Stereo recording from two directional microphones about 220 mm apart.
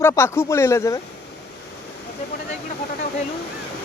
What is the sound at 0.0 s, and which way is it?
Speech, 10° left (ahead or behind).